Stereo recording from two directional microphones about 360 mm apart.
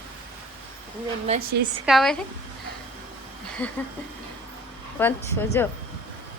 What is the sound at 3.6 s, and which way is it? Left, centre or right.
Speech, centre.